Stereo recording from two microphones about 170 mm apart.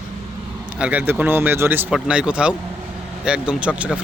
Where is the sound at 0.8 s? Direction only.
10° right (ahead or behind).